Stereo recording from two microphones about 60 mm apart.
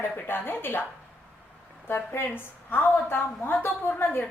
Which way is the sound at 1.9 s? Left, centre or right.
Left.